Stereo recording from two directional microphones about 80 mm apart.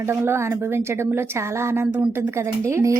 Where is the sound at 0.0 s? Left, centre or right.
Right.